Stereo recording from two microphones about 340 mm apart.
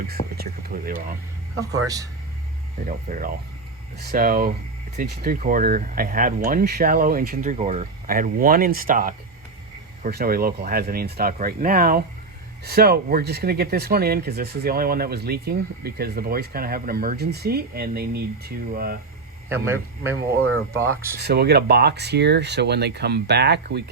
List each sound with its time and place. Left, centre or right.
0.3 s speech: right
2.8 s speech: right
19.5 s speech: centre
21.2 s speech: right